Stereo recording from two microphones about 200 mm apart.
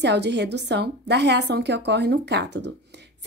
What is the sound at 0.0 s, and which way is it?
A woman's voice, 60° right (ahead or behind).